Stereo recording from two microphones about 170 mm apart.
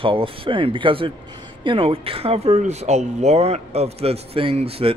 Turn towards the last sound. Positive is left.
turn(degrees=-35)  # may be behind; listen again after turning